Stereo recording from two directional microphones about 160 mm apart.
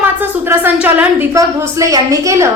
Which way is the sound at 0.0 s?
15° right (ahead or behind).